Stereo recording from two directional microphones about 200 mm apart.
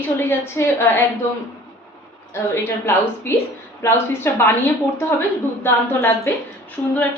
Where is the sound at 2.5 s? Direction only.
10° left (ahead or behind).